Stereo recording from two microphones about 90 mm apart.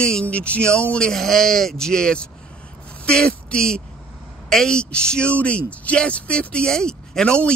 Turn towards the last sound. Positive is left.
turn(degrees=10)  # may be behind; listen again after turning